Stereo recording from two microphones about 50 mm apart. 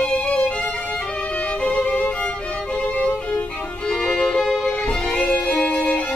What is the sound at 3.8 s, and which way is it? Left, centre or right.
Music, centre.